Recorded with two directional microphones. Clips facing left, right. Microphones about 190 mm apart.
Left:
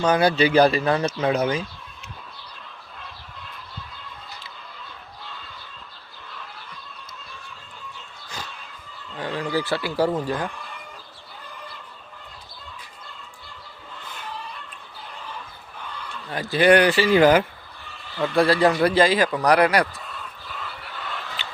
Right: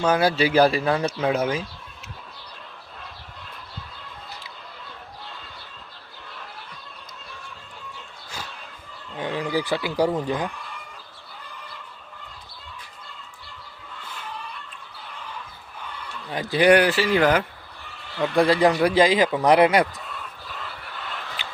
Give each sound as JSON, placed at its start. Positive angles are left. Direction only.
{"t": 0.0, "sound": "speech", "side_deg": -5}
{"t": 9.1, "sound": "speech", "side_deg": -15}
{"t": 16.3, "sound": "speech", "side_deg": -20}
{"t": 18.2, "sound": "speech", "side_deg": -20}
{"t": 21.4, "sound": "fowl", "side_deg": -10}